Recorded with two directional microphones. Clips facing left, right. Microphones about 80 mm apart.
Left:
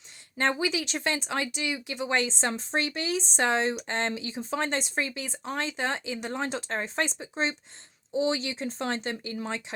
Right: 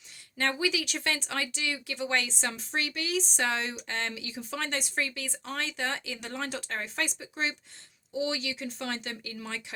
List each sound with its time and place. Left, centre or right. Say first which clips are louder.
0.3 s speech: left 2 dB; left